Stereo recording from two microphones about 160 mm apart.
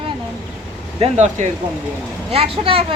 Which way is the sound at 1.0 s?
45° right (ahead or behind).